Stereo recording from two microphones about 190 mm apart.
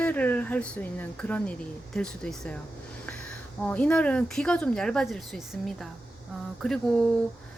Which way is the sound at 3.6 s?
5° left (ahead or behind).